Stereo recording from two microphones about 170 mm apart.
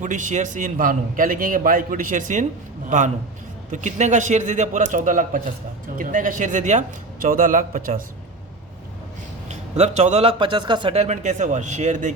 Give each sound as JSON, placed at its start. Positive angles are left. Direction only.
{"t": 0.0, "sound": "a man's voice", "side_deg": -45}
{"t": 3.7, "sound": "a man's voice", "side_deg": -45}
{"t": 9.5, "sound": "a man's voice", "side_deg": -40}